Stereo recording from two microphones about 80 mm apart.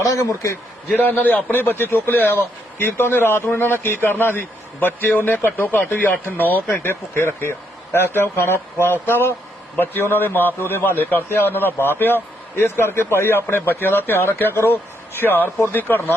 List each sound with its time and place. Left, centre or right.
0.0 s speech: left
0.9 s a man's voice: left